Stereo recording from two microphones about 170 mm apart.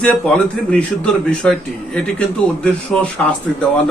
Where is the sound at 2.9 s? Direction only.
5° left (ahead or behind).